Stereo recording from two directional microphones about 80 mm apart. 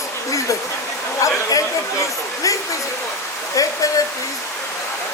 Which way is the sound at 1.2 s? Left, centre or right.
Left.